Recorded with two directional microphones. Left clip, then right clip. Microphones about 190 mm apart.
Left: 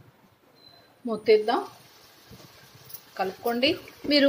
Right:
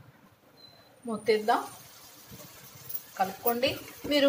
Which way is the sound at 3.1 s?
55° left (ahead or behind).